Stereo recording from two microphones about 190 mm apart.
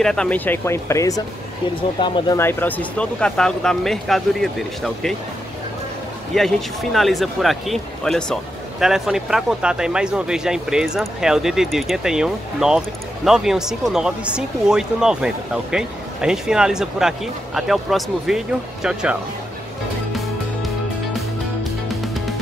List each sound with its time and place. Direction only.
0.0 s speech: 5° left (ahead or behind); by 2.3 s 25° left (ahead or behind)
2.3 s speech: 10° left (ahead or behind)
6.3 s speech: centre (ahead or behind)